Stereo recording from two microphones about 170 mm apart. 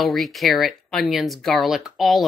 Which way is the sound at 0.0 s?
Centre (ahead or behind).